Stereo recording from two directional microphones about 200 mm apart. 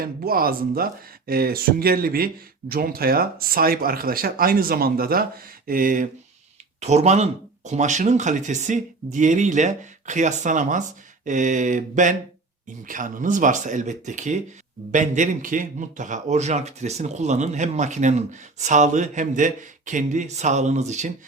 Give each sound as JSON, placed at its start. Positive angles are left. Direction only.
{"t": 0.0, "sound": "a man's voice", "side_deg": -45}